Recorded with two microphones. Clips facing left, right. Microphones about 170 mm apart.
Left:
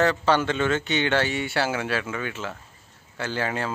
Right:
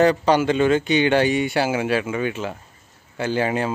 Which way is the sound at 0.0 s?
15° right (ahead or behind).